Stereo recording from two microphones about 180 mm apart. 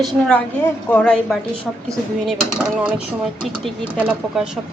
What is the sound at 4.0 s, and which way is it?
Speech, 5° right (ahead or behind).